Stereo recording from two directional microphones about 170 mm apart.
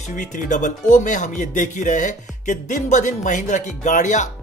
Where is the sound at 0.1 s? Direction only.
50° left (ahead or behind).